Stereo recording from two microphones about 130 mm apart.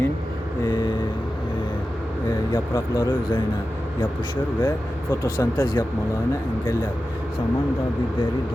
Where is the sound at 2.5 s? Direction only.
30° left (ahead or behind).